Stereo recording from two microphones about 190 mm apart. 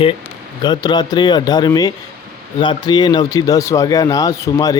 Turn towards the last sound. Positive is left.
turn(degrees=20)  # may be behind; listen again after turning